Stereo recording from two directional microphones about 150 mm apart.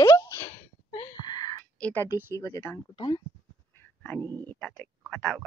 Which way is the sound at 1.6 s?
10° left (ahead or behind).